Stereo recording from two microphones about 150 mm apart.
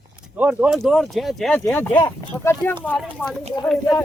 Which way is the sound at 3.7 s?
20° left (ahead or behind).